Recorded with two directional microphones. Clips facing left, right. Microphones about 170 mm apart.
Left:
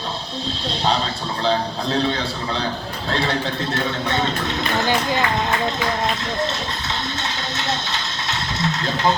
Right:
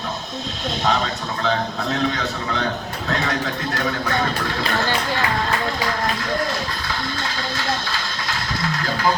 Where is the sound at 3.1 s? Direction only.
30° left (ahead or behind).